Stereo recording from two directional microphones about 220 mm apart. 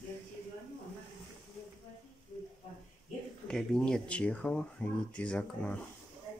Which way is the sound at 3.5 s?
Centre (ahead or behind).